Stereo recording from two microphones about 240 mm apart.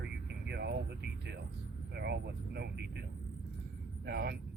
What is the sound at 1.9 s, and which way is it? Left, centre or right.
Speech, right.